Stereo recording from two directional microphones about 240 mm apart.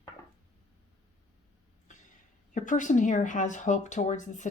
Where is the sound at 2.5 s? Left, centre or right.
Left.